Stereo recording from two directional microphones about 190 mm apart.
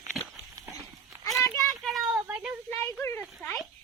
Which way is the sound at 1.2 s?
15° left (ahead or behind).